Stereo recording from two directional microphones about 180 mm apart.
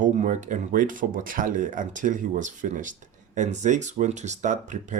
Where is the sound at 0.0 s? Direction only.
40° right (ahead or behind).